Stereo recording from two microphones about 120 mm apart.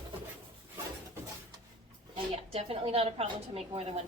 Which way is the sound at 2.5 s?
55° right (ahead or behind).